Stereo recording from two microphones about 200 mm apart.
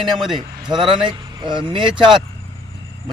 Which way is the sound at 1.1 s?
25° right (ahead or behind).